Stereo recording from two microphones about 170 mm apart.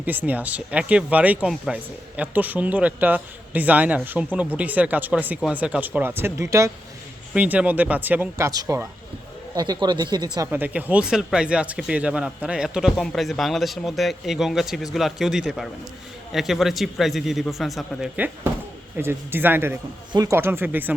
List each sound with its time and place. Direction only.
0.0 s speech: 10° right (ahead or behind)
10.5 s speech: 10° right (ahead or behind)
18.9 s speech: 15° right (ahead or behind)